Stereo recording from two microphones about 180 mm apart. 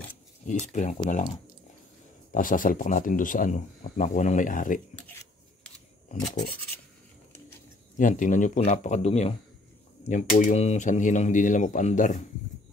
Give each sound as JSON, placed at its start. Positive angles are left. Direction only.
{"t": 0.5, "sound": "speech", "side_deg": 40}
{"t": 4.9, "sound": "writing", "side_deg": 10}
{"t": 8.0, "sound": "speech", "side_deg": 45}